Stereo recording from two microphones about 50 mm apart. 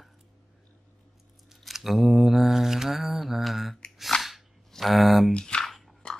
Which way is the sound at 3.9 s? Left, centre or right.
Centre.